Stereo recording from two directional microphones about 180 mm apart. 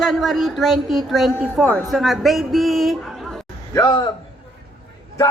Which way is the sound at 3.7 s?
25° left (ahead or behind).